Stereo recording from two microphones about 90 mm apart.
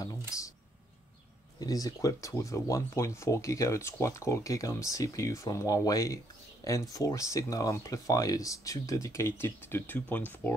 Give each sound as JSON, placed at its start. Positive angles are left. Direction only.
{"t": 0.0, "sound": "typing", "side_deg": 40}
{"t": 1.6, "sound": "speech", "side_deg": 45}